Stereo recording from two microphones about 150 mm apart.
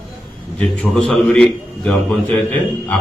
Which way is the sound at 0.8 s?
5° left (ahead or behind).